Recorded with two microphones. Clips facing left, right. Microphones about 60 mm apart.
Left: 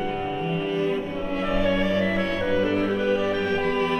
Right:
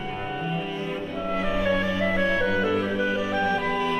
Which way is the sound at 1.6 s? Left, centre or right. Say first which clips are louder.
Left 3 dB; centre.